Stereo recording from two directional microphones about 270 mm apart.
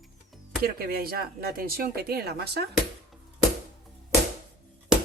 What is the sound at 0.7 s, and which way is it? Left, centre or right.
Speech, right.